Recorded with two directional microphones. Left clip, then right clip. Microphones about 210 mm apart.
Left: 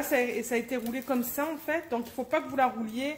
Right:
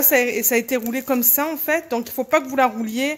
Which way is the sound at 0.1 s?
55° right (ahead or behind).